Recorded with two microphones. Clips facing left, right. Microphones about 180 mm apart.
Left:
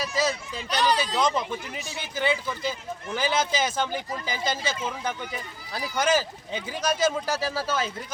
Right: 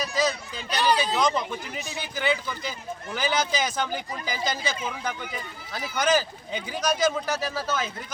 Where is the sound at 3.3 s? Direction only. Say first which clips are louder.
Even; 25° left (ahead or behind).